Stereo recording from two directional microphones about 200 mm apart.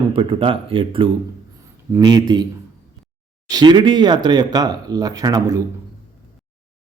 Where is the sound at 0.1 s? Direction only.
25° right (ahead or behind).